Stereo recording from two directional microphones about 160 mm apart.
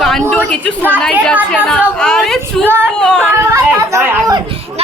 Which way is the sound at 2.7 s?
15° right (ahead or behind).